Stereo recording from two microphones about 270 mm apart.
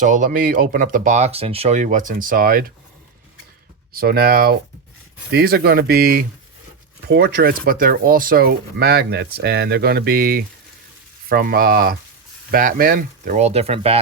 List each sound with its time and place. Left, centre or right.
0.0 s speech: right
3.9 s speech: right